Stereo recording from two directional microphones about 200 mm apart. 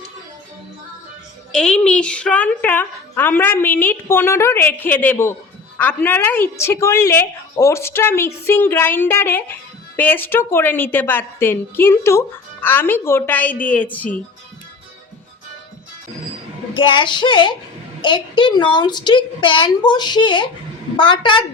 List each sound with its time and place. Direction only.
1.5 s a woman's voice: 5° left (ahead or behind)
16.7 s a woman's voice: 25° left (ahead or behind)